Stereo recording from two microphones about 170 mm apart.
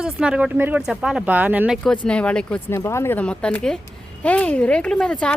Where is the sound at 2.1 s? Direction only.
5° left (ahead or behind).